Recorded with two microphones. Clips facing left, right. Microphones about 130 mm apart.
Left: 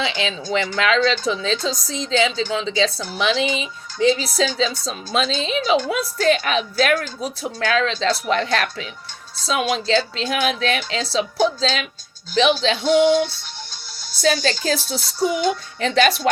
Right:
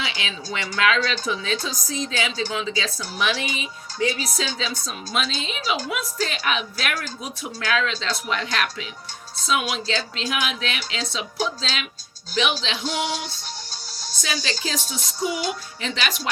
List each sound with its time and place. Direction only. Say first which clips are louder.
0.0 s a woman's voice: left 7 dB; 30° left (ahead or behind)
12.3 s a woman's voice: left 7 dB; 35° left (ahead or behind)